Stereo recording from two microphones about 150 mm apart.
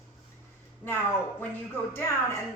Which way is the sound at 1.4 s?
15° left (ahead or behind).